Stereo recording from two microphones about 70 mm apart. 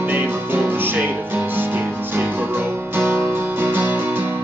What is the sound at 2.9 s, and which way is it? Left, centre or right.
Music, right.